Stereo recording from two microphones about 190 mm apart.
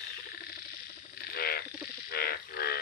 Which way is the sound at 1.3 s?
55° left (ahead or behind).